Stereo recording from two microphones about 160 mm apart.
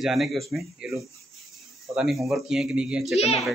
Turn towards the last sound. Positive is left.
turn(degrees=40)  # may be behind; listen again after turning